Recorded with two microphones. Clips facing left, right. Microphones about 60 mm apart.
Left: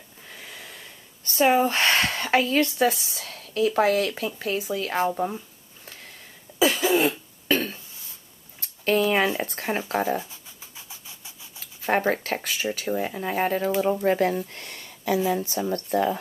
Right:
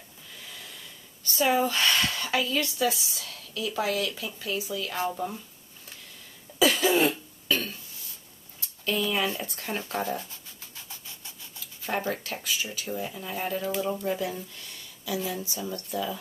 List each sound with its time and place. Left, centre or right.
0.3 s speech: left
6.6 s cough: left
7.4 s a sound: left
9.4 s speech: left
10.1 s a sound: centre
11.8 s speech: left